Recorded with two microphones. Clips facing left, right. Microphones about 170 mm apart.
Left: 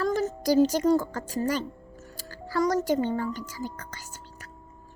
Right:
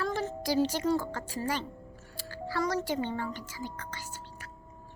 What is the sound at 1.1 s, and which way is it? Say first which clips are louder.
Speech: left 5 dB; 45° left (ahead or behind).